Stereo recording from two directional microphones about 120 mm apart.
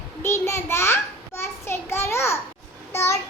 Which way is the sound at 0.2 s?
20° left (ahead or behind).